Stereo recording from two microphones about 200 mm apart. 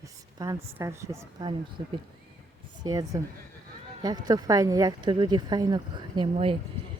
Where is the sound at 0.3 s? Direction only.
15° right (ahead or behind).